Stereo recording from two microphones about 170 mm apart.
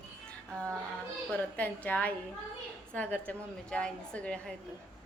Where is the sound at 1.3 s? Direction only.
10° left (ahead or behind).